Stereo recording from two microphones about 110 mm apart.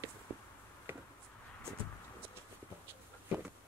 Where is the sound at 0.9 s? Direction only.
20° right (ahead or behind).